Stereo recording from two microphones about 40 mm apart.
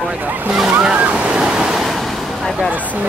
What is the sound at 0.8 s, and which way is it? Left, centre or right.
Waves, right.